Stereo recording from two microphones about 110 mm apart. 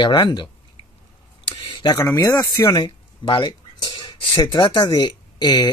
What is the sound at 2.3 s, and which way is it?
Speech, 25° left (ahead or behind).